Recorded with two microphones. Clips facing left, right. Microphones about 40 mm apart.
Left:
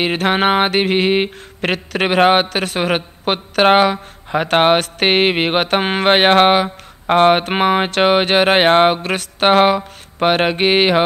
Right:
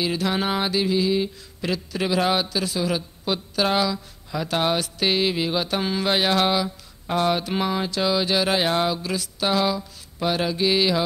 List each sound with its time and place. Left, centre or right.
0.0 s mantra: left